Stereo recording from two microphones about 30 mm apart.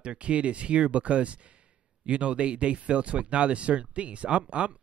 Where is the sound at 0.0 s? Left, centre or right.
Right.